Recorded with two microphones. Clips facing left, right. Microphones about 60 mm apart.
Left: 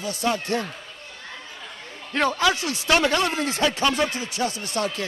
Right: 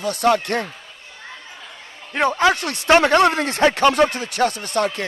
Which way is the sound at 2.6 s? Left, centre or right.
Right.